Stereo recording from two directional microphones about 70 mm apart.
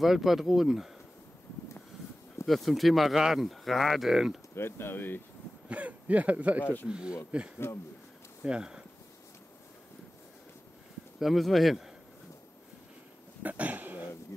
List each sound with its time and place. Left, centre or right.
0.0 s speech: centre
2.4 s speech: centre
4.6 s speech: left
5.7 s speech: right
6.6 s speech: left
6.9 s speech: centre
7.5 s speech: left
8.5 s speech: centre
11.1 s speech: centre
13.4 s a sound: right